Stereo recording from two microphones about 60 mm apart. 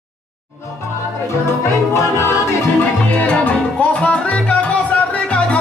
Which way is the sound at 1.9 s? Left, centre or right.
Left.